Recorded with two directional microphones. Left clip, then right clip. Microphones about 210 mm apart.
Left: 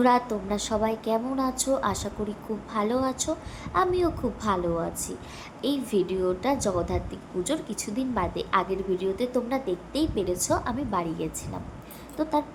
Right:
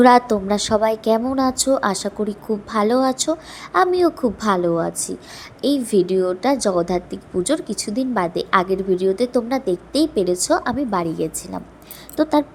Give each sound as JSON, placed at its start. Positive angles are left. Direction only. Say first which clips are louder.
{"t": 0.0, "sound": "a woman's voice", "louder": "right 10 dB", "side_deg": -35}